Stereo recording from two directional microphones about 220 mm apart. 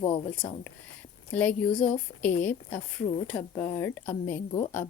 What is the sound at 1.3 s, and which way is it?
Speech, 5° left (ahead or behind).